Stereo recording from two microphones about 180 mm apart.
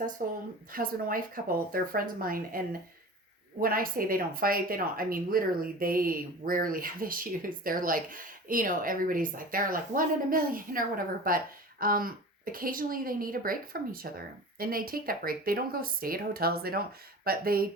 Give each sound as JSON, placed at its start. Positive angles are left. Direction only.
{"t": 0.2, "sound": "speech", "side_deg": -45}